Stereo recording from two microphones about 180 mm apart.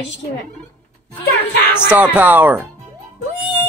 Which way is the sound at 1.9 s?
10° right (ahead or behind).